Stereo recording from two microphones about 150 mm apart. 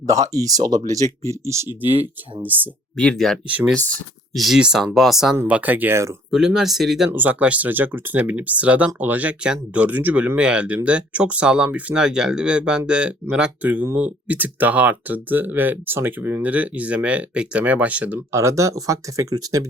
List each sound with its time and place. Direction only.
0.1 s speech: 25° right (ahead or behind)
2.9 s speech: 5° left (ahead or behind)
3.4 s speech: 10° right (ahead or behind)
6.3 s speech: 5° right (ahead or behind); by 19.6 s 25° right (ahead or behind)